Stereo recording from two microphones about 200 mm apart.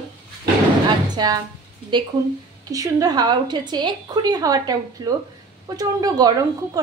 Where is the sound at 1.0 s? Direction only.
20° right (ahead or behind).